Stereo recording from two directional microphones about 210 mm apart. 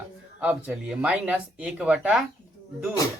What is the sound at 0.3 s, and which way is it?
Speech, 5° right (ahead or behind).